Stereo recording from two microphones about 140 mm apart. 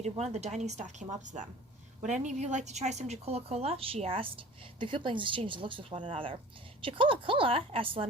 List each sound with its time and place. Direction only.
0.0 s a woman's voice: 50° right (ahead or behind)